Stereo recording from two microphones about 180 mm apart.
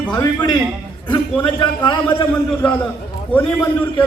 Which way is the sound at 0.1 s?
25° left (ahead or behind).